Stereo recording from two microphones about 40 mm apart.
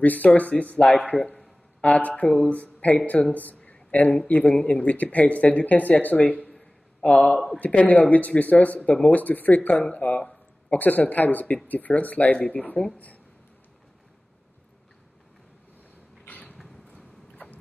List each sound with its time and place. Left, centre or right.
0.0 s speech: left
3.7 s a sound: left
4.3 s speech: left
7.0 s a man's voice: centre
7.5 s speech: left
16.3 s a sound: left